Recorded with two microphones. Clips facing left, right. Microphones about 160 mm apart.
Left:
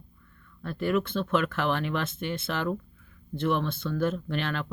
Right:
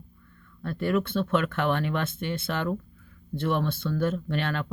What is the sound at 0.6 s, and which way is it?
Speech, 30° right (ahead or behind).